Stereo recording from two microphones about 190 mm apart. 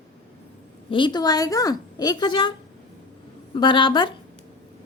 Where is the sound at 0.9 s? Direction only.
25° left (ahead or behind).